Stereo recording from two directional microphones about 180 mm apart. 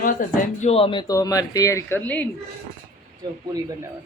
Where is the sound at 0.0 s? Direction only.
50° left (ahead or behind).